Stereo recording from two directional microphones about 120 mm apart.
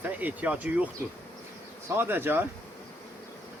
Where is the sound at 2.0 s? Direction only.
20° right (ahead or behind).